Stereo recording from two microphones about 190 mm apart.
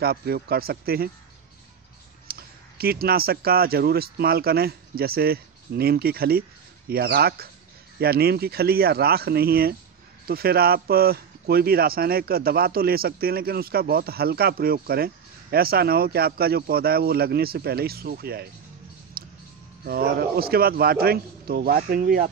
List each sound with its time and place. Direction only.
0.0 s speech: 55° right (ahead or behind)
2.2 s speech: 55° right (ahead or behind)
19.2 s music: 50° right (ahead or behind)
19.8 s speech: 55° right (ahead or behind)